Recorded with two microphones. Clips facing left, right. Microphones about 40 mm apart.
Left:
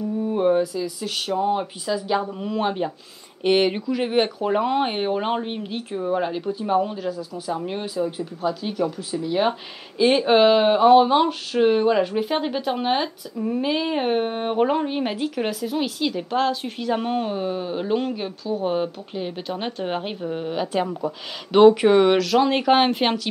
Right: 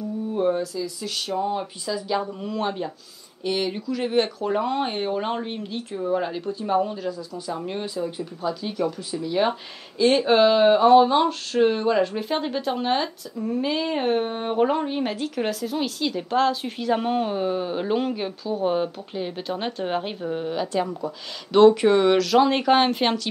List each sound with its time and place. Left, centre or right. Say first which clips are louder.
0.3 s speech: left 3 dB; left
2.2 s speech: left 3 dB; centre
3.4 s speech: left 6 dB; left
3.8 s speech: left 2 dB; centre
9.1 s speech: left 1 dB; centre
22.2 s speech: even; centre